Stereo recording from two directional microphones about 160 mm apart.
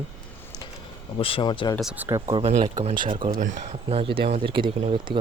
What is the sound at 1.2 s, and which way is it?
Speech, 35° left (ahead or behind).